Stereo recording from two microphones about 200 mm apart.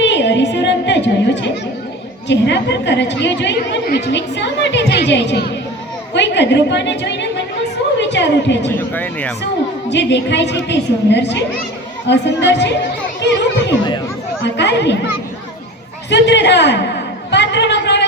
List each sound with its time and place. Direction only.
0.0 s a capella: 60° left (ahead or behind)
2.2 s a woman's voice: 60° left (ahead or behind)
8.7 s speech: 10° left (ahead or behind)
9.9 s a woman's voice: 60° left (ahead or behind)
16.0 s a sound: 60° left (ahead or behind)